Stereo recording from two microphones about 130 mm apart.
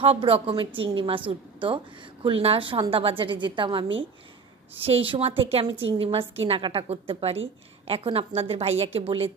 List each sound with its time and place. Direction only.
0.0 s a woman's voice: 45° right (ahead or behind)